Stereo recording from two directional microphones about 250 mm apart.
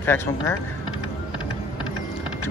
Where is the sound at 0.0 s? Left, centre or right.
Centre.